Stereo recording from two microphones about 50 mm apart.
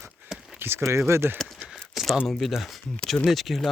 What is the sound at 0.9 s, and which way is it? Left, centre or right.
Speech, right.